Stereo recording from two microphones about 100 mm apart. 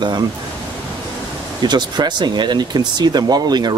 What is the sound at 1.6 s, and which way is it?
Speech, 45° right (ahead or behind).